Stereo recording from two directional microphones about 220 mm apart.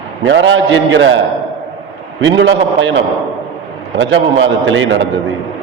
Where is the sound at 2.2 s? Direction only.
55° right (ahead or behind).